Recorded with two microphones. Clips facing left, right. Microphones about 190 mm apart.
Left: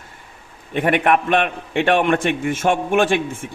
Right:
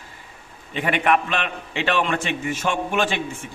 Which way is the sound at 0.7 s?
50° left (ahead or behind).